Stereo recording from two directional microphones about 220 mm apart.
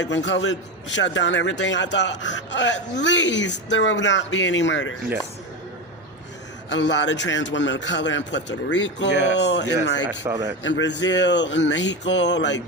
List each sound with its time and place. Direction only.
0.0 s a man's voice: 55° left (ahead or behind)
6.7 s a man's voice: 55° left (ahead or behind)
10.1 s speech: 15° right (ahead or behind)
10.6 s speech: 55° left (ahead or behind)